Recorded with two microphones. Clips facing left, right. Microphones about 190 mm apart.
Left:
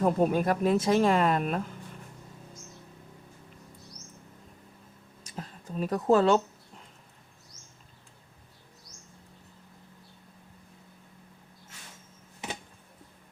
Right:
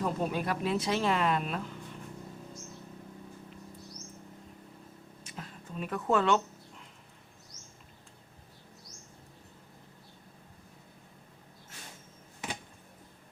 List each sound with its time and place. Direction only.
0.0 s speech: 50° left (ahead or behind)
5.2 s speech: 40° left (ahead or behind)